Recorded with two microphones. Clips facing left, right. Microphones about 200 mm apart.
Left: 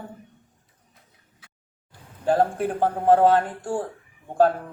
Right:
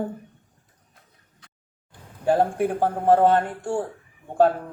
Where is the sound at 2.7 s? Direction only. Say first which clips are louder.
Left 2 dB; 5° right (ahead or behind).